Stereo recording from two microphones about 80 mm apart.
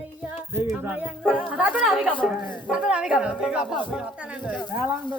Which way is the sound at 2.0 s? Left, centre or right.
Centre.